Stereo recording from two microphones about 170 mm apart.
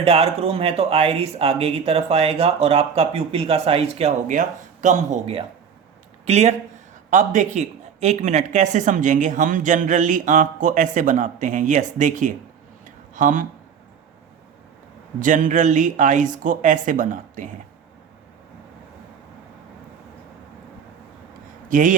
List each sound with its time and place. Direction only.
0.0 s speech: 35° right (ahead or behind)
15.2 s speech: 50° right (ahead or behind)
21.7 s a man's voice: 50° right (ahead or behind)